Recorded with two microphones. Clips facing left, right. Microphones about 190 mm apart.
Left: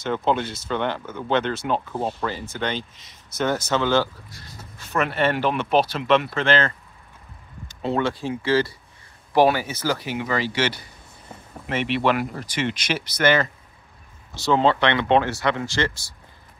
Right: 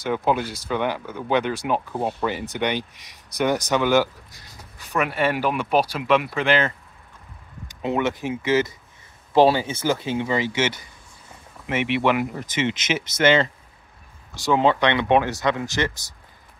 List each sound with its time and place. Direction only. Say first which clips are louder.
0.0 s speech: even; 10° right (ahead or behind)